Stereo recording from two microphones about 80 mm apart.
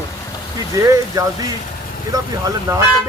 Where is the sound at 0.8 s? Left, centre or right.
Right.